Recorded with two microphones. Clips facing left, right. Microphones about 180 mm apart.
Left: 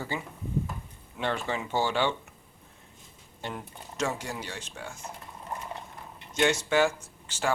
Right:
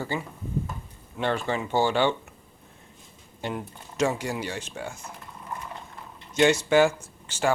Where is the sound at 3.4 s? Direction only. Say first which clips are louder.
Right 5 dB; 10° right (ahead or behind).